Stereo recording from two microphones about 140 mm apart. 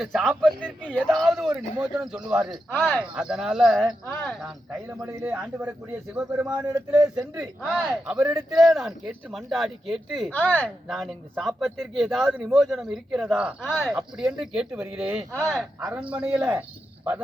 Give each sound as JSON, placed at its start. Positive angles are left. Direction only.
{"t": 0.0, "sound": "speech", "side_deg": 0}
{"t": 2.7, "sound": "speech", "side_deg": 5}
{"t": 3.0, "sound": "speech", "side_deg": -5}
{"t": 4.9, "sound": "speech", "side_deg": -20}
{"t": 6.5, "sound": "a man's voice", "side_deg": -30}
{"t": 7.2, "sound": "speech", "side_deg": -5}
{"t": 10.3, "sound": "speech", "side_deg": 10}
{"t": 10.8, "sound": "speech", "side_deg": 0}